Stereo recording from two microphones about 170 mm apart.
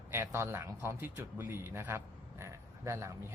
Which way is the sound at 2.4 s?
15° right (ahead or behind).